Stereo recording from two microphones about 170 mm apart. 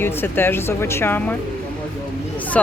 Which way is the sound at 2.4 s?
10° left (ahead or behind).